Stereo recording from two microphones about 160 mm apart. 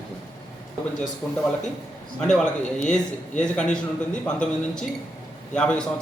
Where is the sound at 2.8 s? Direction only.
50° left (ahead or behind).